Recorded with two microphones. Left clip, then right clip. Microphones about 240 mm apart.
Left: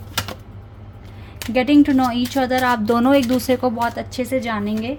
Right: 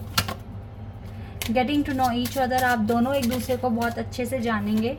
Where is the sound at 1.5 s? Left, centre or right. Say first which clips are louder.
Left 8 dB; left.